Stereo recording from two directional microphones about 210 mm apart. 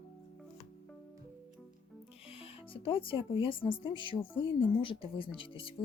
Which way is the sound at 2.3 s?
25° left (ahead or behind).